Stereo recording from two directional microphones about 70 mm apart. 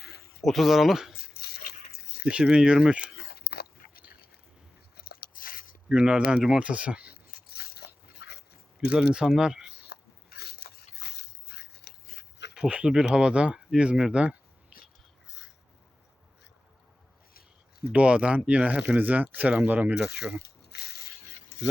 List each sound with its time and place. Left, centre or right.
0.4 s speech: centre
2.3 s speech: centre
5.9 s speech: centre
8.9 s speech: centre
12.5 s speech: centre
14.7 s whispering: centre
17.9 s speech: centre